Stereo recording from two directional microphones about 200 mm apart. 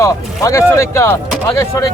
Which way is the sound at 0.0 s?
15° left (ahead or behind).